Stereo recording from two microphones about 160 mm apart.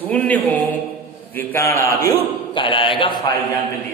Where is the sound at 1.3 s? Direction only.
15° left (ahead or behind).